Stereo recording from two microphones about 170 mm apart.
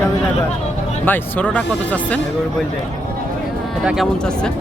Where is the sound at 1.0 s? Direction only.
10° left (ahead or behind).